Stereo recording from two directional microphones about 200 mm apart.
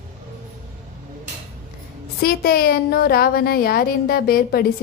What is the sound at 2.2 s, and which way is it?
A woman's voice, 50° left (ahead or behind).